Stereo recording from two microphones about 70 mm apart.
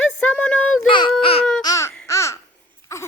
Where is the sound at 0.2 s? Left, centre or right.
Centre.